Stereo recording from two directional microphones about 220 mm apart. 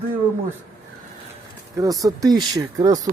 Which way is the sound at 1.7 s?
15° right (ahead or behind).